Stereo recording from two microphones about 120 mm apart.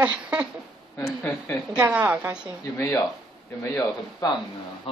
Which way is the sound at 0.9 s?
20° left (ahead or behind).